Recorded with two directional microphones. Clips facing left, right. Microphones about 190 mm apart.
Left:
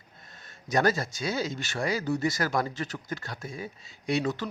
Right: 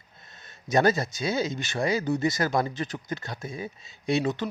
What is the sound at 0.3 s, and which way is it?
Speech, 20° right (ahead or behind).